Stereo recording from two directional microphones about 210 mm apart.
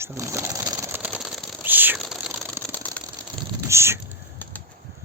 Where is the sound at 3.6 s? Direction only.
10° right (ahead or behind).